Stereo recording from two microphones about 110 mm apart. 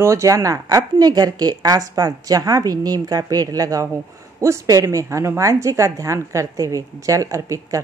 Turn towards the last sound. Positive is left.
turn(degrees=-30)  # may be behind; listen again after turning